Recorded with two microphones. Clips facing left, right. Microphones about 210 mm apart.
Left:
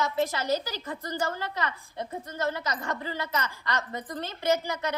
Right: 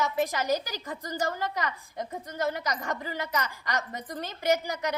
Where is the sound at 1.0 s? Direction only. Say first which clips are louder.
Even; 40° right (ahead or behind).